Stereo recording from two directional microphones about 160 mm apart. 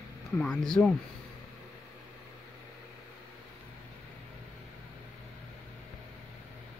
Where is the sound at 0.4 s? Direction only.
5° left (ahead or behind).